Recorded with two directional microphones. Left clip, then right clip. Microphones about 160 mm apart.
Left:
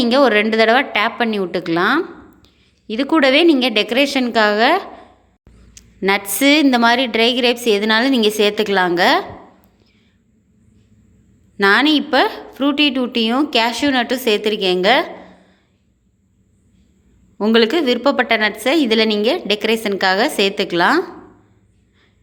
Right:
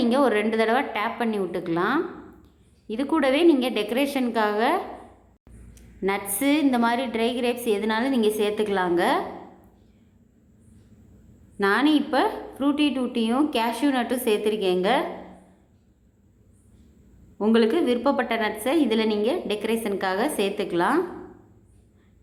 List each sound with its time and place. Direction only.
0.0 s a woman's voice: 25° left (ahead or behind)
11.5 s a woman's voice: 25° left (ahead or behind)
17.3 s a woman's voice: 20° left (ahead or behind)